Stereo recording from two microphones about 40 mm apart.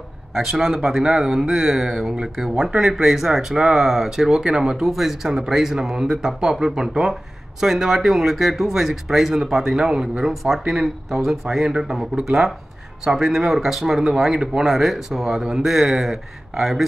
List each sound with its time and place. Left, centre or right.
0.3 s speech: centre
14.7 s speech: centre